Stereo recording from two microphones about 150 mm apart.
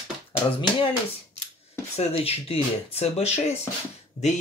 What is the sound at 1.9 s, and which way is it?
Speech, 40° left (ahead or behind).